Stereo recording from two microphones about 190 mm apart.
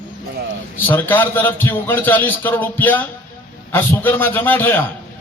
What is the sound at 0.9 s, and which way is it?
A man's voice, 10° left (ahead or behind).